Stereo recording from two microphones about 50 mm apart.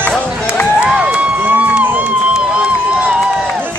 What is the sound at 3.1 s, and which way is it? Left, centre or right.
Run, centre.